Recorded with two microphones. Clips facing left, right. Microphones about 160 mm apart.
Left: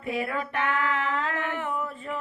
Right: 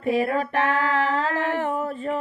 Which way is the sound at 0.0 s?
30° right (ahead or behind).